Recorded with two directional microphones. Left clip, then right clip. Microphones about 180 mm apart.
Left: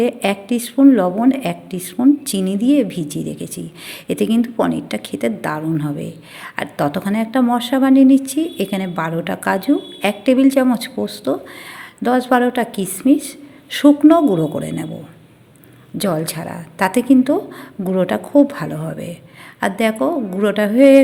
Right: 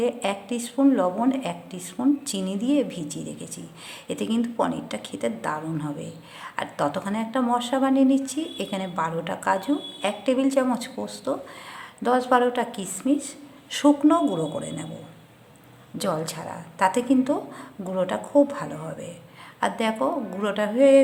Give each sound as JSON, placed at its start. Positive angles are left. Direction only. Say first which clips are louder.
{"t": 0.0, "sound": "a woman's voice", "louder": "left 7 dB", "side_deg": 20}
{"t": 16.0, "sound": "a woman's voice", "louder": "left 7 dB", "side_deg": 20}